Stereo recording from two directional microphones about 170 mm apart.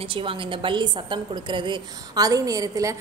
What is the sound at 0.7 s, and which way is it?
A woman's voice, 25° right (ahead or behind).